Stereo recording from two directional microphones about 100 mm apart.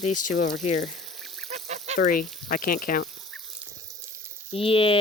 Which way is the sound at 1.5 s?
90° right.